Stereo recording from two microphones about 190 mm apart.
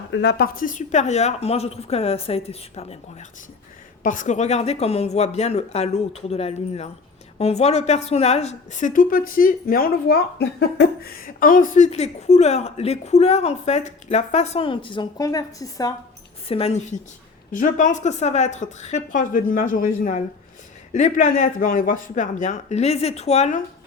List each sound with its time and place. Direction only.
0.1 s a woman's voice: 60° left (ahead or behind); by 3.2 s 35° left (ahead or behind)
4.0 s a woman's voice: 45° left (ahead or behind); by 16.0 s 20° left (ahead or behind)
16.5 s a woman's voice: 30° left (ahead or behind)
17.5 s a woman's voice: 45° left (ahead or behind)